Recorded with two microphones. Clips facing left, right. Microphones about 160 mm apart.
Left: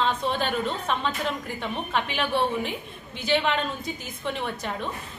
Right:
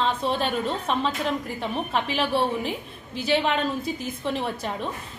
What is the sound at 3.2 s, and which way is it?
Speech, 30° right (ahead or behind).